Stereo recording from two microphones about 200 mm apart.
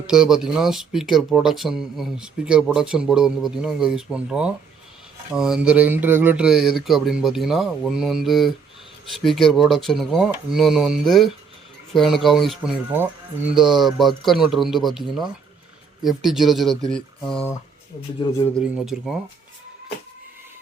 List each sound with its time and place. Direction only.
0.1 s speech: 5° right (ahead or behind)
18.2 s speech: 20° left (ahead or behind)
18.6 s speech: centre (ahead or behind)